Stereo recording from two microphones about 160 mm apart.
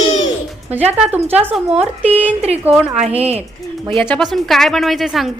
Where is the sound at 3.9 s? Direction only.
Centre (ahead or behind).